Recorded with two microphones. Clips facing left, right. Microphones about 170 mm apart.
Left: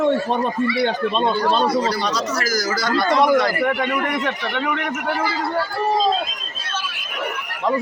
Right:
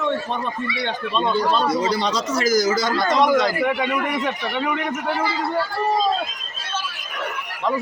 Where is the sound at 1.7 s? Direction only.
20° right (ahead or behind); by 4.7 s 5° right (ahead or behind).